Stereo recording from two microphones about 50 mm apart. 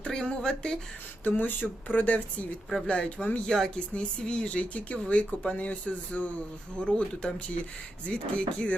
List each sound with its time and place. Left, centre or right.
0.0 s speech: centre
1.2 s speech: left
2.8 s speech: centre
3.4 s speech: centre
3.9 s speech: centre